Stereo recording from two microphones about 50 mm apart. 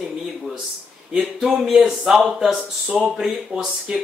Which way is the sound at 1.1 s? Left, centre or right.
Centre.